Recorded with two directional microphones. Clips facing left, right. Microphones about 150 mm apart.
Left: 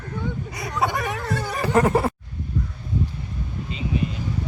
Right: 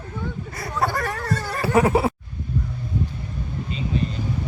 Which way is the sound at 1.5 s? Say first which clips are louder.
Right 1 dB; centre (ahead or behind).